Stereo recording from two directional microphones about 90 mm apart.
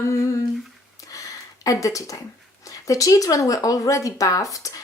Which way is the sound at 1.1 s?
40° left (ahead or behind).